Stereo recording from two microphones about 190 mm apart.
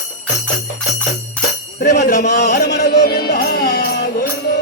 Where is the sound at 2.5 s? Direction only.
60° left (ahead or behind).